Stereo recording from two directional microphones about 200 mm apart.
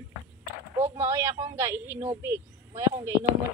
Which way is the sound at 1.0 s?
15° right (ahead or behind).